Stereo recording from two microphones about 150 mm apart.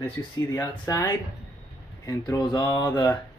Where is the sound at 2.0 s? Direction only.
25° left (ahead or behind).